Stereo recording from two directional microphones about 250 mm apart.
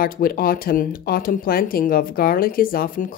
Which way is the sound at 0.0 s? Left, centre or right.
Left.